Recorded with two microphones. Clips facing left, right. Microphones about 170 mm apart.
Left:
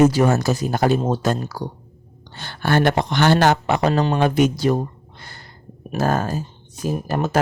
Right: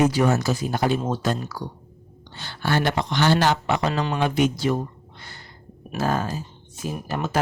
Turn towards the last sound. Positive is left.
turn(degrees=45)  # may be behind; listen again after turning